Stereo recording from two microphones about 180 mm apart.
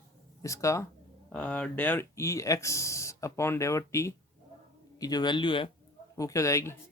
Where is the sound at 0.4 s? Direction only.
15° left (ahead or behind).